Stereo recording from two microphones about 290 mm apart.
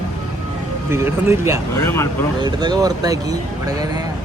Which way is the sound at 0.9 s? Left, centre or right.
Centre.